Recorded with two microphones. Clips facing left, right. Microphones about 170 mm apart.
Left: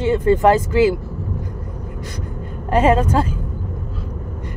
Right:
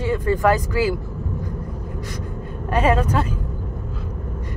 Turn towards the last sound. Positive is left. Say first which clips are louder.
# left 4 dB
turn(degrees=30)  # may be behind; listen again after turning